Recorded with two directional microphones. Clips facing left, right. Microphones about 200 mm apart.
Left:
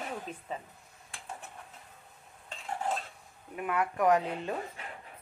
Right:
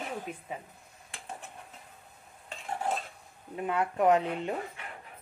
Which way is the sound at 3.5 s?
25° right (ahead or behind).